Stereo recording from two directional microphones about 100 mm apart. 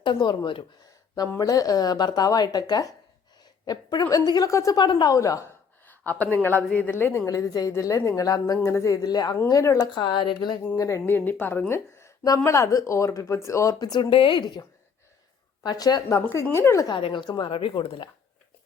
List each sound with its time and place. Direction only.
0.0 s speech: 50° left (ahead or behind)
1.4 s speech: 35° left (ahead or behind)
4.8 s speech: 50° left (ahead or behind)
5.1 s speech: 35° left (ahead or behind)
6.1 s a woman's voice: 20° left (ahead or behind)
7.3 s speech: 35° left (ahead or behind)
10.8 s speech: 30° left (ahead or behind)
11.0 s a woman's voice: 20° left (ahead or behind)
11.7 s a sound: 25° left (ahead or behind)
12.4 s speech: 30° left (ahead or behind); by 14.6 s 50° left (ahead or behind)
15.6 s a woman's voice: 40° left (ahead or behind); by 16.8 s 25° left (ahead or behind)
17.2 s speech: 50° left (ahead or behind)